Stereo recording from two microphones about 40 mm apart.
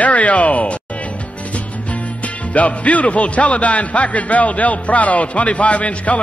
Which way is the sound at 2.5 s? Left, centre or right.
Left.